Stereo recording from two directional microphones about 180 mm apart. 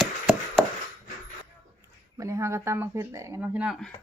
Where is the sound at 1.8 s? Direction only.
15° right (ahead or behind).